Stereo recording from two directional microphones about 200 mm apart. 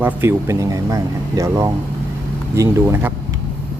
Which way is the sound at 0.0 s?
10° right (ahead or behind).